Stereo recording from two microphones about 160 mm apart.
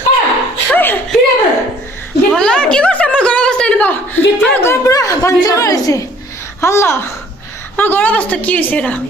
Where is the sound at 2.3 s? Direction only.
5° left (ahead or behind).